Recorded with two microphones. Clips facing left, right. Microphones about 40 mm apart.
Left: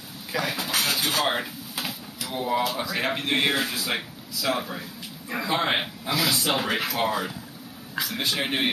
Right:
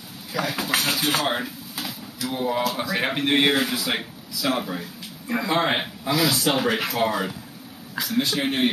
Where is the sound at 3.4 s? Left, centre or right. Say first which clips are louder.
Right 4 dB; right.